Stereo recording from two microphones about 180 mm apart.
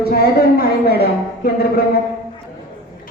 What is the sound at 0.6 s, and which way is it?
A woman's voice, 60° left (ahead or behind).